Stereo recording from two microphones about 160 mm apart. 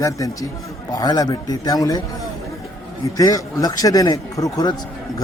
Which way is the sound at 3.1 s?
20° left (ahead or behind).